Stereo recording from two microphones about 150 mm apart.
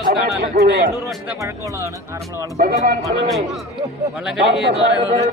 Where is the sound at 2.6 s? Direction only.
70° right (ahead or behind).